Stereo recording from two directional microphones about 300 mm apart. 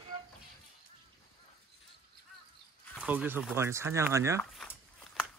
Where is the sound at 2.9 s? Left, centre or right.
Centre.